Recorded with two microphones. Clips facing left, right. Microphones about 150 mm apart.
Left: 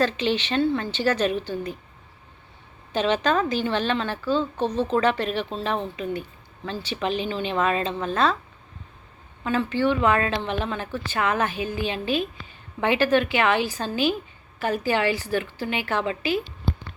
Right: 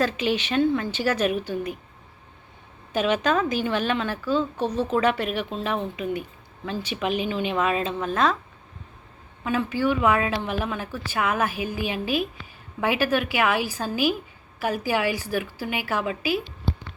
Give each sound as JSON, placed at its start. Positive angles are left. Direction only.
{"t": 0.0, "sound": "a woman's voice", "side_deg": -10}
{"t": 2.9, "sound": "a woman's voice", "side_deg": -10}
{"t": 9.4, "sound": "a woman's voice", "side_deg": -10}